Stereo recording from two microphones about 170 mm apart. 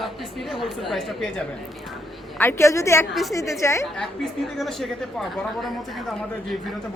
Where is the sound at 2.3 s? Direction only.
15° left (ahead or behind).